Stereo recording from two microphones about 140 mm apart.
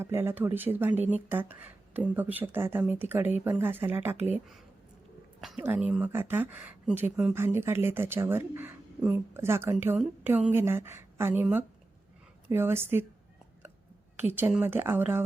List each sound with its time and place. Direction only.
0.0 s a woman's voice: 15° right (ahead or behind)
5.4 s a sound: centre (ahead or behind)
5.6 s a woman's voice: 10° right (ahead or behind)
12.5 s a woman's voice: 15° right (ahead or behind)
14.2 s a woman's voice: 15° right (ahead or behind)